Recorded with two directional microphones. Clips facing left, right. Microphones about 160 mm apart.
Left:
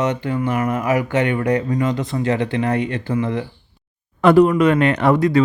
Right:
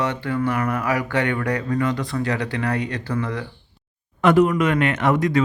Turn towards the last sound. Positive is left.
turn(degrees=30)  # may be behind; listen again after turning